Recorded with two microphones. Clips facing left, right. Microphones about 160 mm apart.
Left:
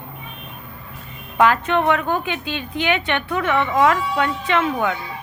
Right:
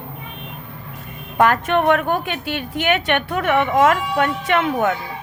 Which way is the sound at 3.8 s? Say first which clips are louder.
Even; 50° right (ahead or behind).